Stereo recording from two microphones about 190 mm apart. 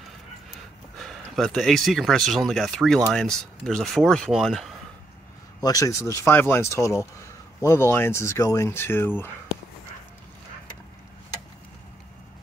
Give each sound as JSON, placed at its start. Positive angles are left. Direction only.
{"t": 1.0, "sound": "speech", "side_deg": 0}
{"t": 5.6, "sound": "speech", "side_deg": 20}